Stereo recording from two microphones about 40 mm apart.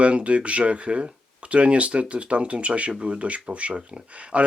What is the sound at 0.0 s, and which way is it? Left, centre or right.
Speech, right.